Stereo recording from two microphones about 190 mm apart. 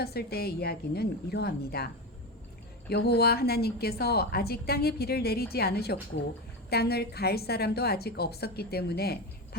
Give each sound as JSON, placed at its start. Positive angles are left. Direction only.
{"t": 0.0, "sound": "a woman's voice", "side_deg": 55}
{"t": 2.9, "sound": "a woman's voice", "side_deg": 55}